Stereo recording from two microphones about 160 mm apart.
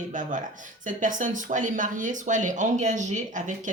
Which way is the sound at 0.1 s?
50° right (ahead or behind).